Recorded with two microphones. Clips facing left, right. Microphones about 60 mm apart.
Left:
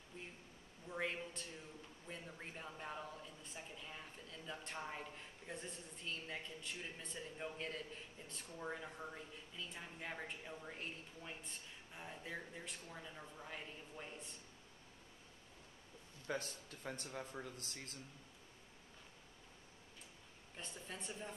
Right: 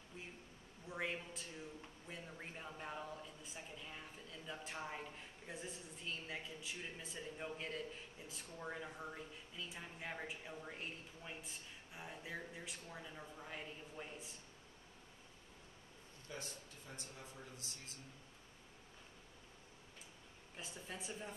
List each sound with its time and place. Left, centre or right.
0.8 s a man's voice: centre
16.3 s a man's voice: left
20.5 s a woman's voice: centre